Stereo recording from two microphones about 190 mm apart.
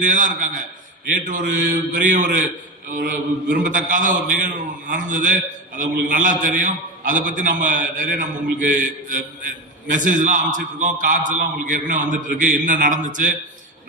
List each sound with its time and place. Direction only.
0.0 s a man's voice: 40° right (ahead or behind)
3.5 s a man's voice: 40° right (ahead or behind)